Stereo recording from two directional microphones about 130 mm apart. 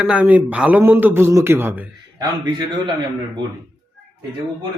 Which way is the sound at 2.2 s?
35° right (ahead or behind).